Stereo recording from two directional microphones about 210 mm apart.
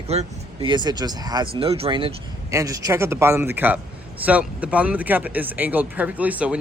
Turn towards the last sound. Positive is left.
turn(degrees=-5)  # may be behind; listen again after turning